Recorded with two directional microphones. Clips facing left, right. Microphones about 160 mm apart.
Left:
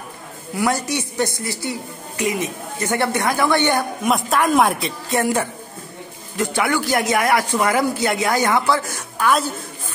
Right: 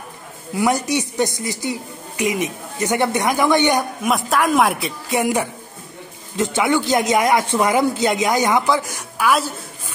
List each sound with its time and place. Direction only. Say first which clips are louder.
0.6 s a woman's voice: right 2 dB; 15° right (ahead or behind)
4.0 s a woman's voice: even; centre (ahead or behind)